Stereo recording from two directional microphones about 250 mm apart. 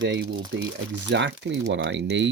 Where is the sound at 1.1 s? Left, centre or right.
Right.